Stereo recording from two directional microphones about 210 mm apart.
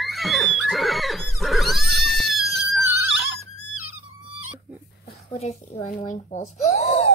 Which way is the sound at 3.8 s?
90° left.